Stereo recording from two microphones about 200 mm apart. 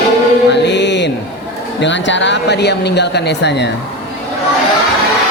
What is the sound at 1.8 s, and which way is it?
Speech, 65° left (ahead or behind).